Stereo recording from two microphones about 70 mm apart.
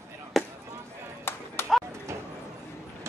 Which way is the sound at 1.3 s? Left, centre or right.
Left.